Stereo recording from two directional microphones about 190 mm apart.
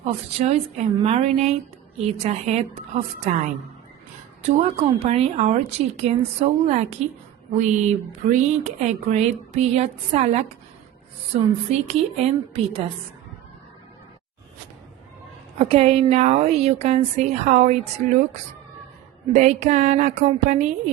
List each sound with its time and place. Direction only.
0.0 s speech: 35° right (ahead or behind)
4.4 s speech: 35° right (ahead or behind)
11.7 s speech: 35° right (ahead or behind)
15.5 s speech: 30° right (ahead or behind)
19.3 s speech: 40° right (ahead or behind)